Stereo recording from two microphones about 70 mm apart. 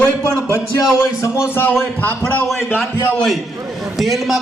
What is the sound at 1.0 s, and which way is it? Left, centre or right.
A man's voice, left.